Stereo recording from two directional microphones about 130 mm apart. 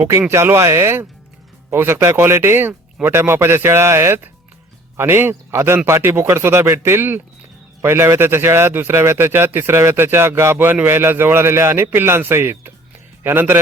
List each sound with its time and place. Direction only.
0.0 s a man's voice: 15° right (ahead or behind)